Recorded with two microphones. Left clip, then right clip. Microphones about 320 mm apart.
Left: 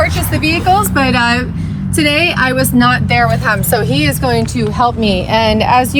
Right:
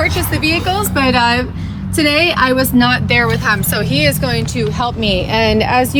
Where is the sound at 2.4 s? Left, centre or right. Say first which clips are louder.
Even; centre.